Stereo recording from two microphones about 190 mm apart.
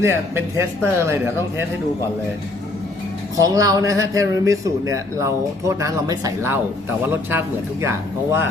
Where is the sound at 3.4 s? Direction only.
20° right (ahead or behind).